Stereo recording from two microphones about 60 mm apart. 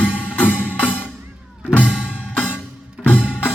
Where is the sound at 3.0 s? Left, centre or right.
Left.